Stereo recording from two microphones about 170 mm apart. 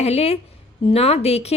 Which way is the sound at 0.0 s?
40° left (ahead or behind).